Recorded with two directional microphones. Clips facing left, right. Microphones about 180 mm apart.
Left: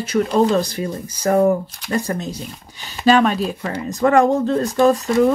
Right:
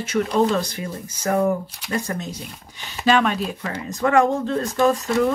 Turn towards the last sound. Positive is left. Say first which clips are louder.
# left 4 dB
turn(degrees=35)  # may be behind; listen again after turning